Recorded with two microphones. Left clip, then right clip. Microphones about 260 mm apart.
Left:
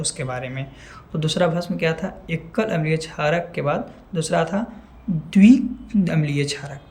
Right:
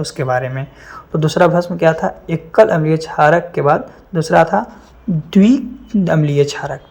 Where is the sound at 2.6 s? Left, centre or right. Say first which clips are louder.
Right 12 dB; right.